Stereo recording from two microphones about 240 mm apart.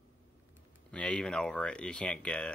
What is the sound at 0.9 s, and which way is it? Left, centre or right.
Speech, centre.